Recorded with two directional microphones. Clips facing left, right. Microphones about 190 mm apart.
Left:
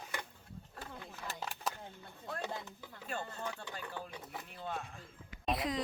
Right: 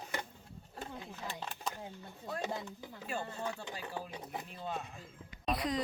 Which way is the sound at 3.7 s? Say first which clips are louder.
Right 2 dB; 20° right (ahead or behind).